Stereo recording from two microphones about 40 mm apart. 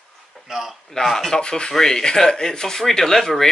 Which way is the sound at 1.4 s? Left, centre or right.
Left.